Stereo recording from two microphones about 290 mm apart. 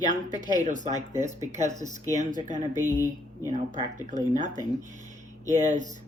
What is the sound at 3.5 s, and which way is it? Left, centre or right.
Speech, right.